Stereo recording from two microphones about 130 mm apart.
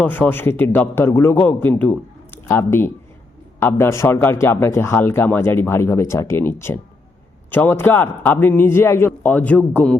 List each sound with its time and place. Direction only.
0.0 s a man's voice: 15° left (ahead or behind)